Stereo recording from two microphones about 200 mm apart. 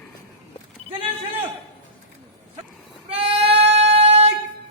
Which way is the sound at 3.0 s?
30° right (ahead or behind).